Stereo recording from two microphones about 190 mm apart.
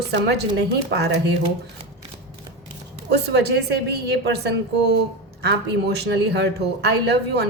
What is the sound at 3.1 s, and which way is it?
Speech, 60° right (ahead or behind).